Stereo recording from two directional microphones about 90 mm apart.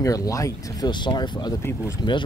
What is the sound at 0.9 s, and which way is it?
Speech, 60° left (ahead or behind).